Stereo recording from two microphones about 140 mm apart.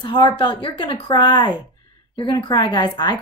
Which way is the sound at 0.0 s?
30° left (ahead or behind).